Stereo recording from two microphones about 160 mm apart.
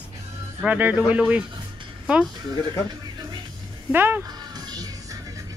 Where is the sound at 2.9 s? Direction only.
25° right (ahead or behind).